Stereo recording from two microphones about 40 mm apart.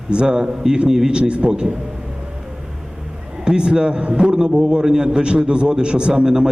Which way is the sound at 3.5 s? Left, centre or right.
Right.